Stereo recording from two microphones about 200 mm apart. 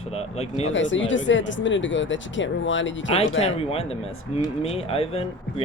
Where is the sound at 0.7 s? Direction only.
70° left (ahead or behind).